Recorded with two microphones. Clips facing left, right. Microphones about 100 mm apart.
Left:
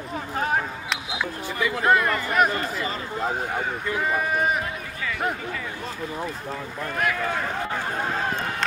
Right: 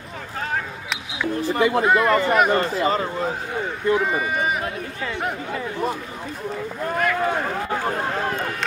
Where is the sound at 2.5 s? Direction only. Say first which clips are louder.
Right 7 dB; 35° right (ahead or behind).